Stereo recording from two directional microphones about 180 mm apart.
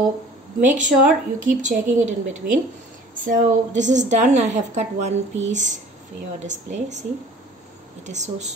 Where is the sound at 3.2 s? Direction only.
45° right (ahead or behind).